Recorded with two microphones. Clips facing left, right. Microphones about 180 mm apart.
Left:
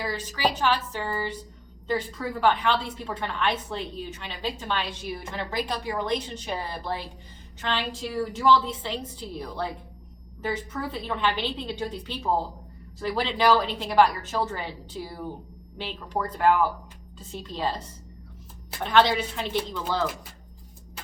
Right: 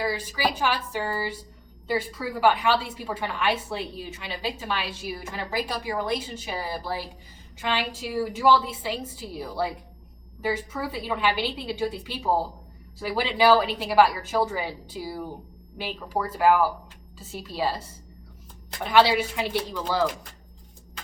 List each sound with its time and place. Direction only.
0.0 s a woman's voice: 10° right (ahead or behind)